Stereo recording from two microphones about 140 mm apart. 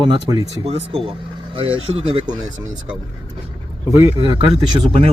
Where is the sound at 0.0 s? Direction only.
30° right (ahead or behind).